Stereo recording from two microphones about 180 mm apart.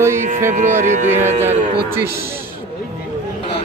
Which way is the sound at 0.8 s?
40° right (ahead or behind).